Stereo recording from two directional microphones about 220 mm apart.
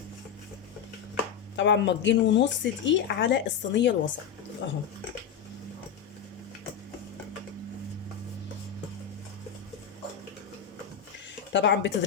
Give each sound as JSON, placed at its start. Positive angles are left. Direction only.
{"t": 1.5, "sound": "speech", "side_deg": 55}
{"t": 11.5, "sound": "speech", "side_deg": 55}